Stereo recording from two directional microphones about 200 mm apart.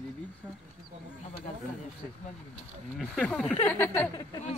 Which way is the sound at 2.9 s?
5° left (ahead or behind).